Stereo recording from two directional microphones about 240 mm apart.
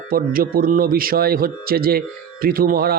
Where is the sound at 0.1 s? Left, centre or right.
Right.